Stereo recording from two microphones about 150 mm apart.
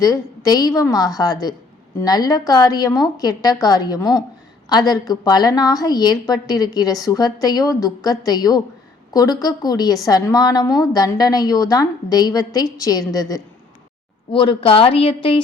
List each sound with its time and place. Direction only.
0.0 s a woman's voice: 25° left (ahead or behind)
14.3 s a woman's voice: 35° left (ahead or behind)